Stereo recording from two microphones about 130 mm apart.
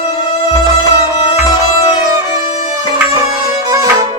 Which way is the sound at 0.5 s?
35° left (ahead or behind).